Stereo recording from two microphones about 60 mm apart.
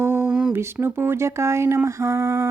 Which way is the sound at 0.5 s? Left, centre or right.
Right.